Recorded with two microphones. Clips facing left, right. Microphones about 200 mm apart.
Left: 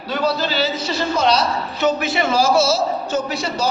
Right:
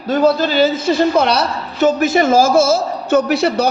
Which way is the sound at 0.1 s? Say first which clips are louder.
Right 7 dB; 50° right (ahead or behind).